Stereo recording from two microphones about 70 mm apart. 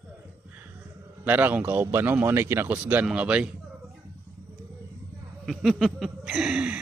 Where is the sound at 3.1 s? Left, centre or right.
Centre.